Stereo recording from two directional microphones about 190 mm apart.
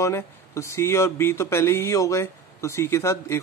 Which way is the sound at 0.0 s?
15° left (ahead or behind).